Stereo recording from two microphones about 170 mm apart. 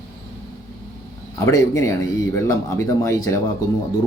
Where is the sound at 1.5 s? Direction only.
20° left (ahead or behind).